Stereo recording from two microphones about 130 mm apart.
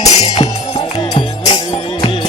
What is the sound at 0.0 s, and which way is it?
Music, 30° left (ahead or behind).